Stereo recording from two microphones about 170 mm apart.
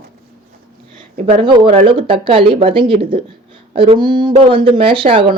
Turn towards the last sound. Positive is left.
turn(degrees=-30)  # may be behind; listen again after turning